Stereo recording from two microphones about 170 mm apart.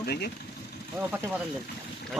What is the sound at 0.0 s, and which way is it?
Speech, 70° left (ahead or behind).